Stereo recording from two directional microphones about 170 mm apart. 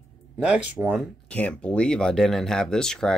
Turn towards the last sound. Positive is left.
turn(degrees=5)  # may be behind; listen again after turning